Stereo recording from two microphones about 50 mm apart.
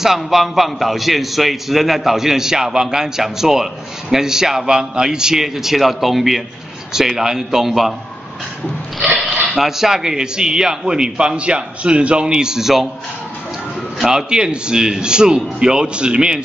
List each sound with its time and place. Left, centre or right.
0.0 s a man's voice: centre
9.3 s speech: centre
14.0 s speech: centre